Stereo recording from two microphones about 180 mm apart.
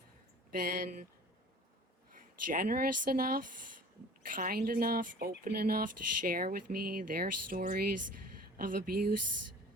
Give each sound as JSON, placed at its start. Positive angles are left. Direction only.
{"t": 0.6, "sound": "speech", "side_deg": -50}
{"t": 2.5, "sound": "speech", "side_deg": -55}